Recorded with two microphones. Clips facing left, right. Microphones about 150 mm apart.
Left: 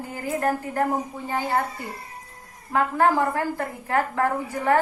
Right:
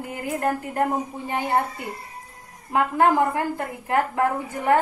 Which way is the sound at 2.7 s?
20° right (ahead or behind).